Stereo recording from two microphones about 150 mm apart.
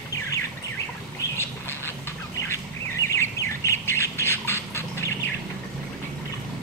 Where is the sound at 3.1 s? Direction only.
20° left (ahead or behind).